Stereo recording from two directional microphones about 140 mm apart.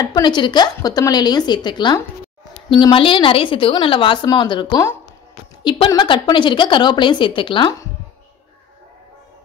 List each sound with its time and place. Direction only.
0.0 s a woman's voice: 30° left (ahead or behind)